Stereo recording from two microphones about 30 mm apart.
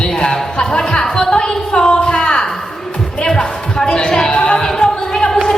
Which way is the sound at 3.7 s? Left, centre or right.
Left.